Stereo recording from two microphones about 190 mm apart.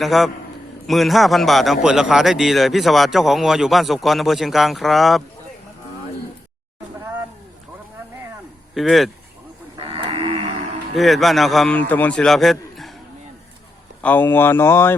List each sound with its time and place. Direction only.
0.0 s a man's voice: centre (ahead or behind)
8.7 s speech: centre (ahead or behind)
9.7 s cattle: 30° right (ahead or behind)
10.9 s a man's voice: centre (ahead or behind)
14.0 s speech: 10° left (ahead or behind)